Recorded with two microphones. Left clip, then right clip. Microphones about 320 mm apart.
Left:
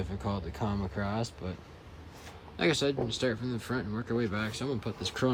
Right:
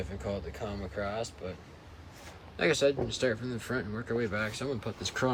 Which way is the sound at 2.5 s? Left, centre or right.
Centre.